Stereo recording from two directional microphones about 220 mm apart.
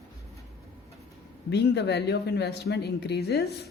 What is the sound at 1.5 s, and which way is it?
Speech, 50° left (ahead or behind).